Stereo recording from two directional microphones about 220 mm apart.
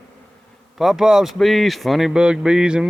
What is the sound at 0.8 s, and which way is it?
Speech, centre (ahead or behind).